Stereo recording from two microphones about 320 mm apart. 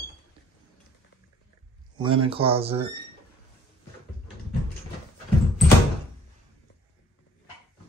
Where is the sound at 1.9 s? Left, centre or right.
Centre.